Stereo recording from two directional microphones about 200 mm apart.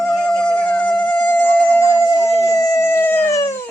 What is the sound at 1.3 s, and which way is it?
Howl, 10° left (ahead or behind).